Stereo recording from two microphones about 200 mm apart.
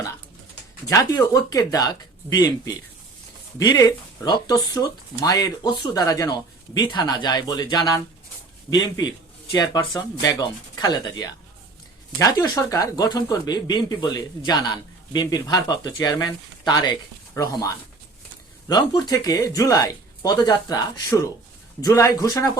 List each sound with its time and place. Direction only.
0.9 s speech: 15° left (ahead or behind)
9.5 s speech: 15° left (ahead or behind)